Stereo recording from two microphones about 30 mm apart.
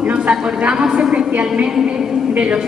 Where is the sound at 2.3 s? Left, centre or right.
Right.